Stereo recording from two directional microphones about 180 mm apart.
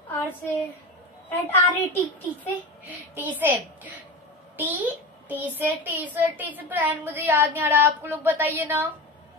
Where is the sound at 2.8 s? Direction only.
10° right (ahead or behind).